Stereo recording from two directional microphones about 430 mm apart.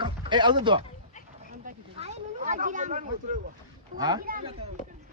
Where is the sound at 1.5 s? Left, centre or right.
Centre.